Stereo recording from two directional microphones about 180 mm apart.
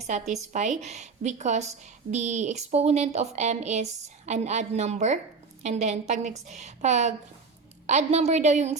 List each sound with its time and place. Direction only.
0.0 s a woman's voice: 40° right (ahead or behind)